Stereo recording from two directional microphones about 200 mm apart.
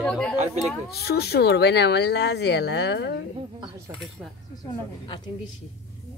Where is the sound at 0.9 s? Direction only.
50° left (ahead or behind).